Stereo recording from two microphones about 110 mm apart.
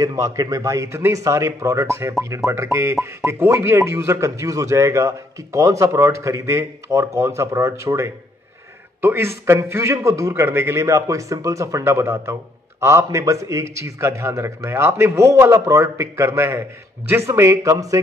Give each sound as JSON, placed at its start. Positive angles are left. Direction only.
{"t": 0.0, "sound": "speech", "side_deg": -30}